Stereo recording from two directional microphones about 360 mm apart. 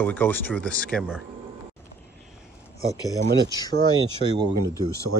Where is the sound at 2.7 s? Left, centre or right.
Centre.